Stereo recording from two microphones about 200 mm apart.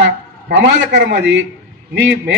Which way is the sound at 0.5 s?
60° right (ahead or behind).